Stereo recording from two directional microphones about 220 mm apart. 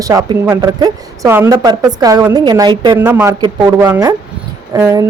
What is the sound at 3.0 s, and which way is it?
A man's voice, 10° right (ahead or behind).